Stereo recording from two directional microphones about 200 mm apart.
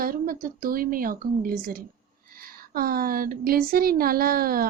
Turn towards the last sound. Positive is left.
turn(degrees=-45)  # may be behind; listen again after turning